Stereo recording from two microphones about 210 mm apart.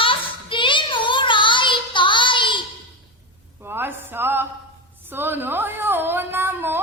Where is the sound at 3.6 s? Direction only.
10° right (ahead or behind).